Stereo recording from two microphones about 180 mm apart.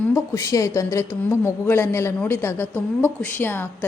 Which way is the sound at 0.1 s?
20° left (ahead or behind).